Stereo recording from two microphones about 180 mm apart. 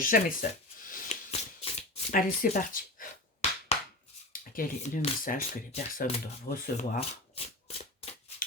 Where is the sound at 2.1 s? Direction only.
50° left (ahead or behind).